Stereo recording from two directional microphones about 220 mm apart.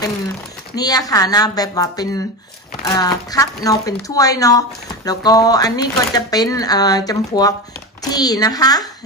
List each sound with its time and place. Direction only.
0.7 s a woman's voice: 15° left (ahead or behind)